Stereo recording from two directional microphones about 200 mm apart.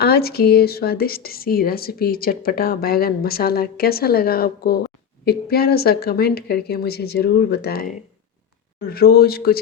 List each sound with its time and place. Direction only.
0.0 s speech: 50° left (ahead or behind)